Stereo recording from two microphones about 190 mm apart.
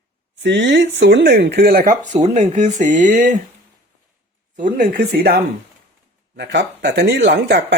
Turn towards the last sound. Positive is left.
turn(degrees=-65)  # may be behind; listen again after turning